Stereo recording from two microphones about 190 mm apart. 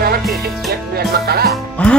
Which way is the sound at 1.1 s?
55° right (ahead or behind).